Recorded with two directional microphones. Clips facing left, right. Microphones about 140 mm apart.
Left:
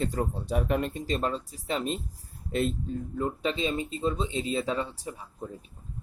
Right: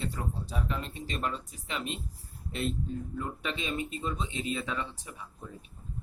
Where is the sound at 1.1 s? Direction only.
35° left (ahead or behind).